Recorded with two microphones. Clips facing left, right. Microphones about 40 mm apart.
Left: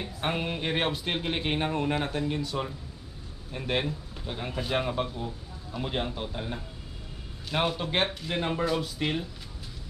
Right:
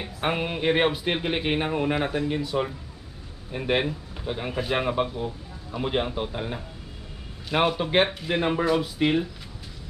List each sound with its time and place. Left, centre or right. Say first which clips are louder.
0.0 s speech: right 4 dB; centre